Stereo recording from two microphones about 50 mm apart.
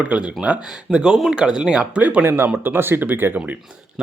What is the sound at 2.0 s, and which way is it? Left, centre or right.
Speech, right.